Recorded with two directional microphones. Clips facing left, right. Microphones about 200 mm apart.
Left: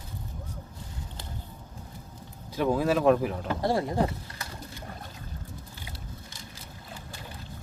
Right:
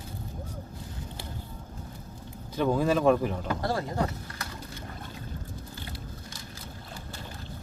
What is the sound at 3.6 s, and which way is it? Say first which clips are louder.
Speech: left 5 dB; 25° left (ahead or behind).